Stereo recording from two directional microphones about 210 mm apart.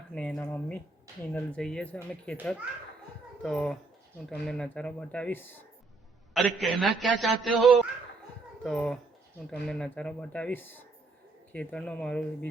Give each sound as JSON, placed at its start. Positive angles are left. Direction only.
{"t": 0.1, "sound": "a man's voice", "side_deg": 5}